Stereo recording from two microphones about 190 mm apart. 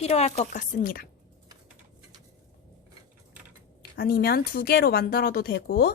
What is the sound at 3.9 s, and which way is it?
Speech, 55° left (ahead or behind).